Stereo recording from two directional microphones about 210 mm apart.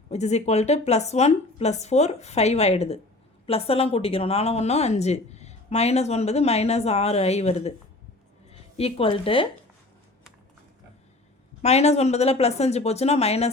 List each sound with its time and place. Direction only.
0.1 s a woman's voice: 30° left (ahead or behind)
11.6 s speech: 30° left (ahead or behind)